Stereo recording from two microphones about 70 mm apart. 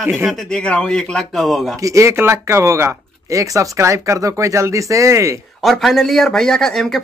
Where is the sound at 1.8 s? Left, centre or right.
Right.